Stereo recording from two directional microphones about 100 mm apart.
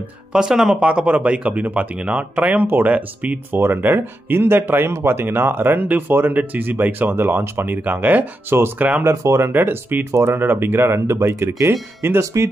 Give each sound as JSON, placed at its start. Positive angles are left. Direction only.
{"t": 0.3, "sound": "speech", "side_deg": -5}
{"t": 9.0, "sound": "speech", "side_deg": -30}